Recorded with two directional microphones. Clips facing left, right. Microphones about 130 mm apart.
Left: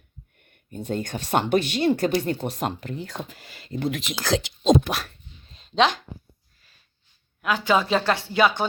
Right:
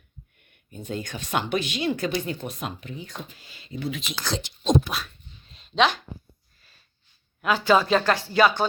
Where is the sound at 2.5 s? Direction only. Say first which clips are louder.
Left 6 dB; 65° left (ahead or behind).